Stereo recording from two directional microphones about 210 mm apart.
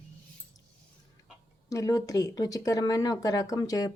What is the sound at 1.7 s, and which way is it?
Speech, 15° left (ahead or behind).